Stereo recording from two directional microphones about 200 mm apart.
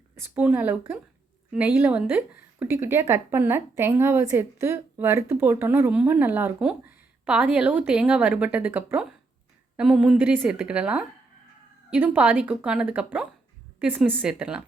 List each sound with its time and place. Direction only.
0.2 s a woman's voice: 10° right (ahead or behind)